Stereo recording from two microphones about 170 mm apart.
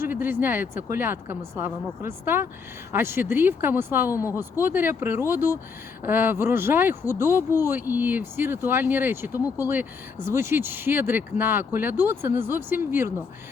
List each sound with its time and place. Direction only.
0.0 s speech: 10° right (ahead or behind)